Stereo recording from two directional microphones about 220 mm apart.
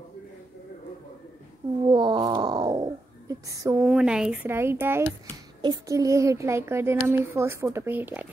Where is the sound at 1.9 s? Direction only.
20° right (ahead or behind).